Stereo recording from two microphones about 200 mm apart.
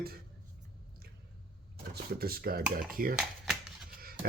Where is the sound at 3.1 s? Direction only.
Centre (ahead or behind).